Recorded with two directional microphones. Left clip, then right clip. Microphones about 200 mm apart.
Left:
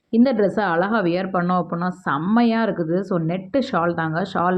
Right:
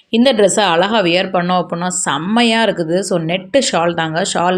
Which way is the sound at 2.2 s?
40° right (ahead or behind).